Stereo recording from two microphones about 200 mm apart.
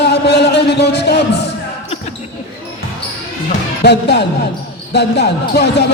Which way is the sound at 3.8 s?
55° left (ahead or behind).